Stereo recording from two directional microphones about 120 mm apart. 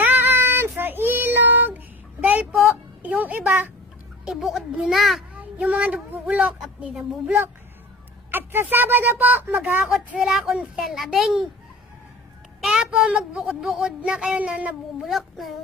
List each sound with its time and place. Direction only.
0.0 s child singing: 15° right (ahead or behind)
2.2 s speech: 10° right (ahead or behind)
4.2 s speech: 5° right (ahead or behind)
5.3 s speech: 10° right (ahead or behind)
8.3 s speech: 15° right (ahead or behind); by 11.4 s centre (ahead or behind)
12.6 s speech: 5° right (ahead or behind)